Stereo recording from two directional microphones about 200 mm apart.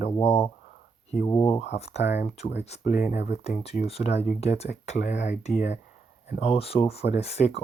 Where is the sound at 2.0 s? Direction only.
60° left (ahead or behind).